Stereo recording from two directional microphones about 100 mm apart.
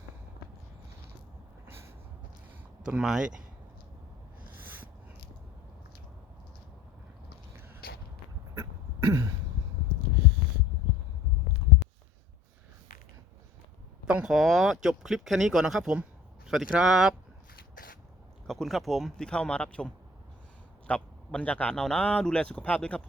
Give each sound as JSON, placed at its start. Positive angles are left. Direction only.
{"t": 2.8, "sound": "speech", "side_deg": -5}
{"t": 8.5, "sound": "throat clearing", "side_deg": -30}
{"t": 14.1, "sound": "speech", "side_deg": -5}
{"t": 18.4, "sound": "speech", "side_deg": 0}